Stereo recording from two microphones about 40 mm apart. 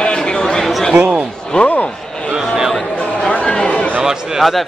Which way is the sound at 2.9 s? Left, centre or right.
Left.